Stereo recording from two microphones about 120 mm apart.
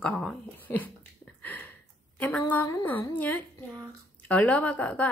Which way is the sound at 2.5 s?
15° left (ahead or behind).